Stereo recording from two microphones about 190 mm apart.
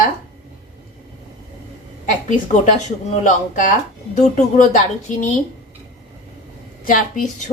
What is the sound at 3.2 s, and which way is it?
A woman's voice, 45° left (ahead or behind).